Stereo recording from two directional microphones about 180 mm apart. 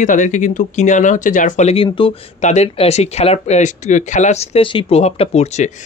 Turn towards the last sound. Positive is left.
turn(degrees=40)  # may be behind; listen again after turning